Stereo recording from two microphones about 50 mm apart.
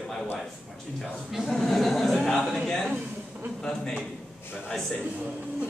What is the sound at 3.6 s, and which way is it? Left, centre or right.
Speech, centre.